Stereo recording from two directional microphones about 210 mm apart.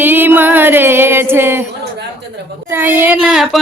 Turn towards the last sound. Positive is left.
turn(degrees=0)  # may be behind; listen again after turning